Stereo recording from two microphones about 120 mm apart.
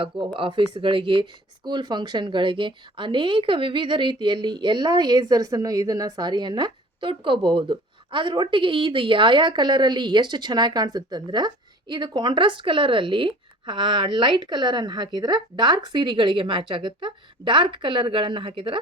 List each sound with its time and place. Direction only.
0.3 s speech: 45° right (ahead or behind)